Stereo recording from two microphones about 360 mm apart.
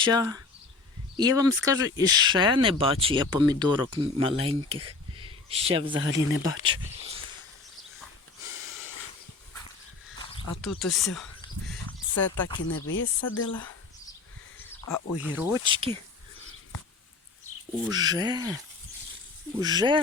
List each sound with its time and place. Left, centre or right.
0.0 s speech: centre
6.3 s speech: left
6.7 s speech: centre
10.6 s speech: centre
12.5 s speech: left
14.8 s speech: left
15.2 s speech: centre
17.8 s speech: centre